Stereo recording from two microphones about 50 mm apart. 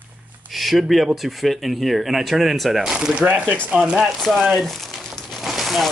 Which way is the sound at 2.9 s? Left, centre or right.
Centre.